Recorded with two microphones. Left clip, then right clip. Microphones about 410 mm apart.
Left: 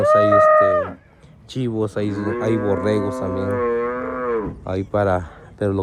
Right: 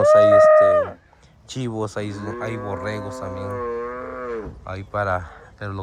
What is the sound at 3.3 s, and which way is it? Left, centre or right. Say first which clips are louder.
Livestock: left 6 dB; centre.